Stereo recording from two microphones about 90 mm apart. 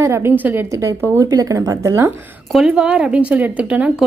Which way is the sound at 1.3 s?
40° right (ahead or behind).